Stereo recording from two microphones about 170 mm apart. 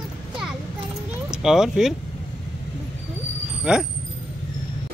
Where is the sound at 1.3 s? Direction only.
5° right (ahead or behind).